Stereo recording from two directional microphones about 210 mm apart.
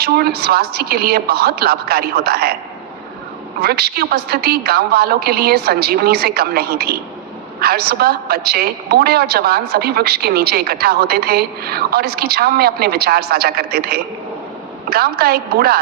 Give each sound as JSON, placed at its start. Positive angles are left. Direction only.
{"t": 0.0, "sound": "a woman's voice", "side_deg": -50}
{"t": 3.6, "sound": "a woman's voice", "side_deg": -50}